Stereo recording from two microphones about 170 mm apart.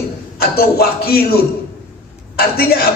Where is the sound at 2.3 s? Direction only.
65° left (ahead or behind).